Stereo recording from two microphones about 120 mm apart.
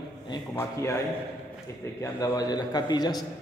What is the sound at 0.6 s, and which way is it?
Speech, 20° left (ahead or behind).